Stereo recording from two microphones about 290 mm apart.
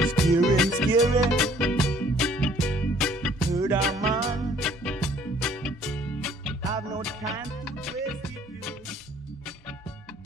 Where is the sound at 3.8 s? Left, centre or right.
Centre.